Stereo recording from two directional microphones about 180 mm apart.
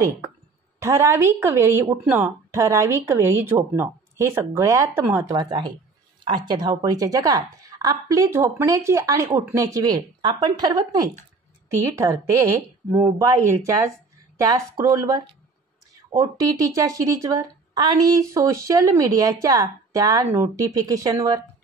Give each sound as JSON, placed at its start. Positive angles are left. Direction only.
{"t": 0.7, "sound": "speech", "side_deg": -15}